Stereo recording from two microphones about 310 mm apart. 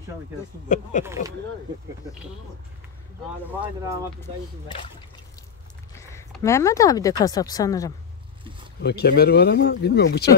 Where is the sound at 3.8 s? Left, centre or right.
Centre.